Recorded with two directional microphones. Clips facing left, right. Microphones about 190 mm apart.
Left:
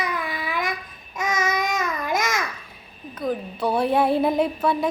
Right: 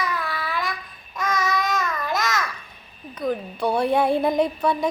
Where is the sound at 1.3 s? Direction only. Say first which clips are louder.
Even; 15° left (ahead or behind).